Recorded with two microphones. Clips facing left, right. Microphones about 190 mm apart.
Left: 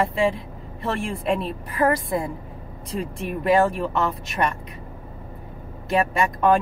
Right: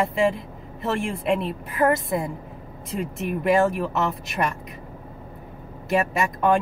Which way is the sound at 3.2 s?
5° right (ahead or behind).